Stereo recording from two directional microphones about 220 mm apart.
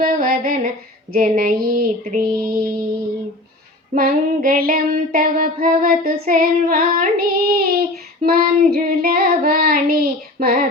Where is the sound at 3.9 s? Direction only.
40° right (ahead or behind).